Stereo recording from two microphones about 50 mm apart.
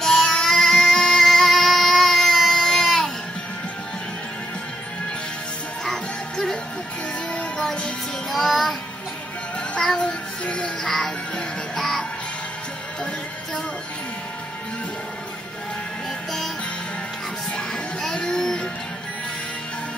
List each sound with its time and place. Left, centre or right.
0.0 s child singing: centre
5.9 s music: centre
8.3 s music: centre
9.8 s music: centre
10.0 s music: left
10.8 s music: centre
18.1 s music: centre